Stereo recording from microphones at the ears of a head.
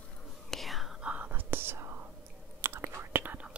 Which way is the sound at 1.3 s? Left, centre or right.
Right.